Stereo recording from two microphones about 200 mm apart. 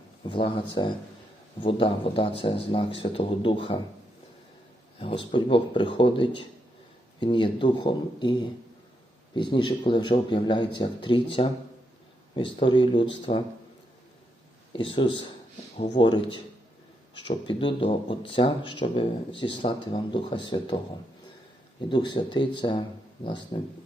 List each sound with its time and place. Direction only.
0.3 s speech: 25° left (ahead or behind)
4.9 s speech: 25° left (ahead or behind)
14.7 s speech: 25° left (ahead or behind)
21.8 s speech: 25° left (ahead or behind)